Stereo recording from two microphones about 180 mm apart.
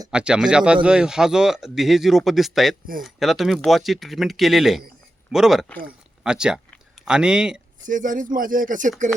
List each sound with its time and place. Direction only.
0.1 s a man's voice: 5° right (ahead or behind)
7.9 s speech: 45° right (ahead or behind)